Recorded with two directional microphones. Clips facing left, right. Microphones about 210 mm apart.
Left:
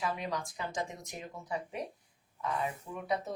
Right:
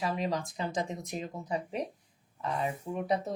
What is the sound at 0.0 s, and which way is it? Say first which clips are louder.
Speech: right 4 dB; 35° right (ahead or behind).